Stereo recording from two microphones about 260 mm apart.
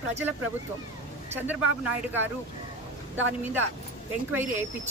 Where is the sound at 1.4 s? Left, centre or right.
Centre.